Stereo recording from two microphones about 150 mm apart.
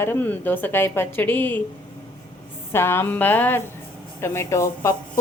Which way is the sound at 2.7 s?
15° left (ahead or behind).